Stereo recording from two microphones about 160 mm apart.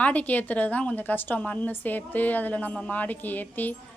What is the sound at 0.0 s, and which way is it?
A woman's voice, 10° left (ahead or behind).